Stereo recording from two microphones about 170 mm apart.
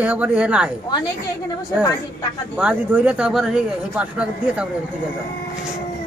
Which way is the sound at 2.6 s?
10° right (ahead or behind).